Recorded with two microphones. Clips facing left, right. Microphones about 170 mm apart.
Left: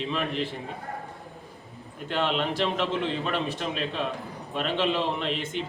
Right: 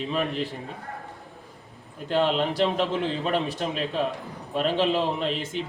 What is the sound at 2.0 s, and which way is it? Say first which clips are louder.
A man's voice: right 4 dB; 35° right (ahead or behind).